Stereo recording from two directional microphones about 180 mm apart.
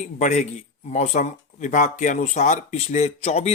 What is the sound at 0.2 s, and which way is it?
Speech, 40° left (ahead or behind).